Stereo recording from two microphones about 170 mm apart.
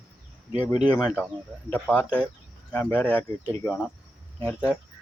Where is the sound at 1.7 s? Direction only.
10° left (ahead or behind).